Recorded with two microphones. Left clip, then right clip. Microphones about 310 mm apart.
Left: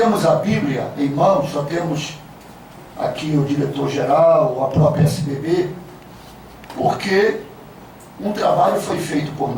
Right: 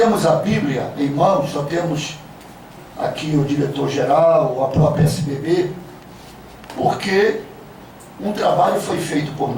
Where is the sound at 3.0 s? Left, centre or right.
Centre.